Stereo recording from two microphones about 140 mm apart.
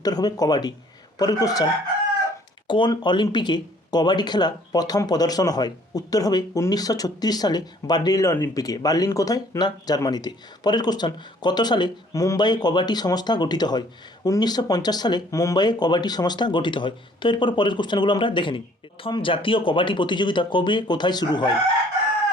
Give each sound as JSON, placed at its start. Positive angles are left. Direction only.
{"t": 0.0, "sound": "speech", "side_deg": 30}
{"t": 2.6, "sound": "speech", "side_deg": 35}